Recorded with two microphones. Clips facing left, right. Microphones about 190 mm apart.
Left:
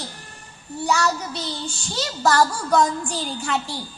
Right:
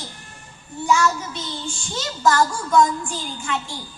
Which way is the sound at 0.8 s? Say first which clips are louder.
Right 2 dB; 40° left (ahead or behind).